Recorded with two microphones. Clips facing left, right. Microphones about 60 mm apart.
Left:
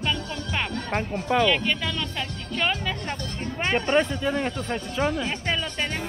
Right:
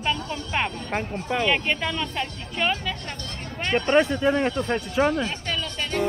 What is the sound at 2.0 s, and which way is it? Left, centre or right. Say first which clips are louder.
Speech: right 2 dB; centre.